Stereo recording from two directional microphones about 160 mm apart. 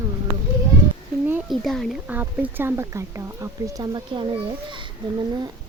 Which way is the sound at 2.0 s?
10° right (ahead or behind).